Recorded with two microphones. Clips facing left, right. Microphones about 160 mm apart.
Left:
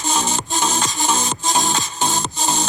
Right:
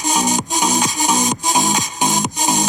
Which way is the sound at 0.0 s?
15° right (ahead or behind).